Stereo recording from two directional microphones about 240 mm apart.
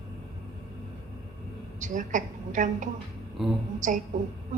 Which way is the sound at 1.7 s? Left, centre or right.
Right.